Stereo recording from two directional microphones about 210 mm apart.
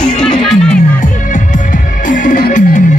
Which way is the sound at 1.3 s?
40° left (ahead or behind).